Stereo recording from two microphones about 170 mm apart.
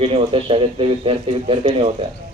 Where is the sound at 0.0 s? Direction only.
35° right (ahead or behind).